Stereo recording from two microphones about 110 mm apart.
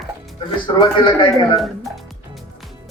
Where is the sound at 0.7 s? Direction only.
50° left (ahead or behind).